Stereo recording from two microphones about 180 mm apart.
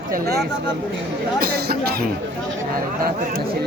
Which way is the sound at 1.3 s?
55° right (ahead or behind).